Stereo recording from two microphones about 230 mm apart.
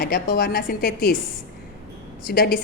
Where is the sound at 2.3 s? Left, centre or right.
Left.